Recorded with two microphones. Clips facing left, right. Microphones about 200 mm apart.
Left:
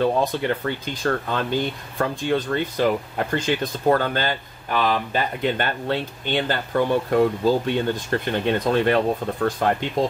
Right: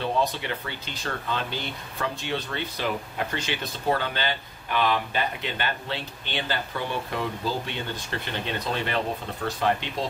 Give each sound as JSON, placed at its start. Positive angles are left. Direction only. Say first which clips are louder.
{"t": 0.0, "sound": "speech", "louder": "left 6 dB", "side_deg": 50}